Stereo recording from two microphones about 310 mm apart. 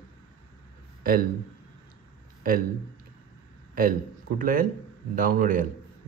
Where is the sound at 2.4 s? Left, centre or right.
Right.